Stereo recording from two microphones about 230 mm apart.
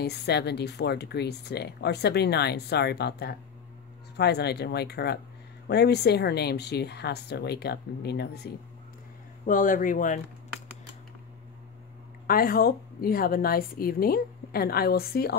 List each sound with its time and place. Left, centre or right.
0.0 s speech: left
9.5 s a woman's voice: left
12.3 s a woman's voice: left